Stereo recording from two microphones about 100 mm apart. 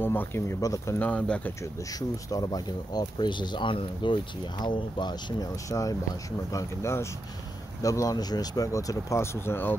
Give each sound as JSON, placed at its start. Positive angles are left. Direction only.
{"t": 0.0, "sound": "speech", "side_deg": 20}
{"t": 0.6, "sound": "speech", "side_deg": 35}
{"t": 0.9, "sound": "speech", "side_deg": 15}
{"t": 1.6, "sound": "speech", "side_deg": 35}
{"t": 5.7, "sound": "speech", "side_deg": 35}